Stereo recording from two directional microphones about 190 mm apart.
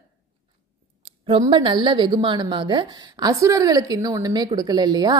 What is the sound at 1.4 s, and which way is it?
A woman's voice, 25° right (ahead or behind).